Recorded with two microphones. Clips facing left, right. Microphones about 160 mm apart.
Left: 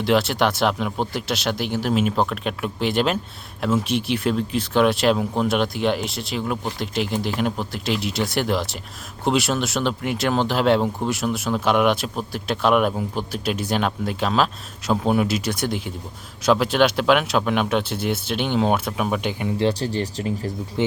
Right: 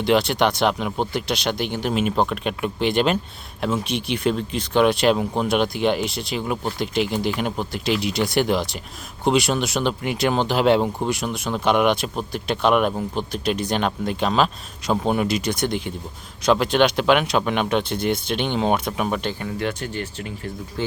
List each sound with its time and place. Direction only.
0.0 s speech: centre (ahead or behind)
19.2 s speech: 15° left (ahead or behind)
19.5 s speech: 30° left (ahead or behind)
20.8 s speech: 20° left (ahead or behind)